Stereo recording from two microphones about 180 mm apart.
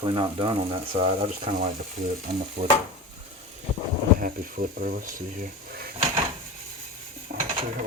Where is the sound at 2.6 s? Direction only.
40° right (ahead or behind).